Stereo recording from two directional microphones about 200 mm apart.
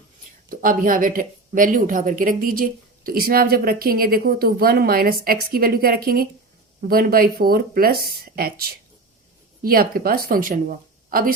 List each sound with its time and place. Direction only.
0.5 s a woman's voice: 45° right (ahead or behind)